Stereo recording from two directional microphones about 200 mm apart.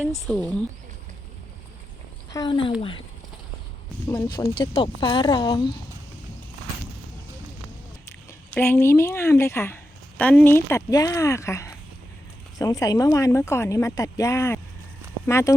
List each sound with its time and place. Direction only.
0.0 s speech: centre (ahead or behind)
2.3 s speech: 20° left (ahead or behind)
4.0 s speech: 20° left (ahead or behind)
8.4 s speech: 10° left (ahead or behind)